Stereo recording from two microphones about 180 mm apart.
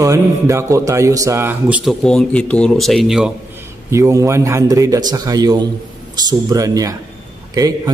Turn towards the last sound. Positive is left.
turn(degrees=-20)  # may be behind; listen again after turning